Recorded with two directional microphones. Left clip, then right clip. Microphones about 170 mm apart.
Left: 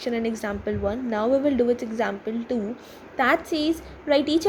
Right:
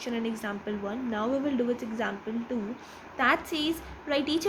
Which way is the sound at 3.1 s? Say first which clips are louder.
Left 4 dB; 35° left (ahead or behind).